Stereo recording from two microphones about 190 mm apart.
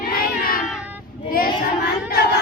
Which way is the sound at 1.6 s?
60° left (ahead or behind).